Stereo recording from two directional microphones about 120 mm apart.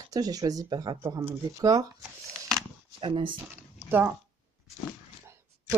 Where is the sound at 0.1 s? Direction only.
30° right (ahead or behind).